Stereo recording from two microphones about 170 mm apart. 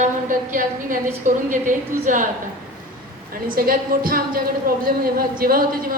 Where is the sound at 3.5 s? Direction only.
55° right (ahead or behind).